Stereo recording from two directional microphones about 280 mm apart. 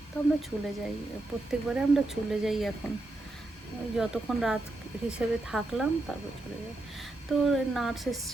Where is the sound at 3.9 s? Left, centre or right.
Centre.